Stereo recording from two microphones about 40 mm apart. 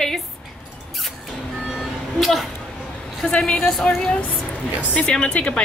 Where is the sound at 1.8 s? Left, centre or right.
Centre.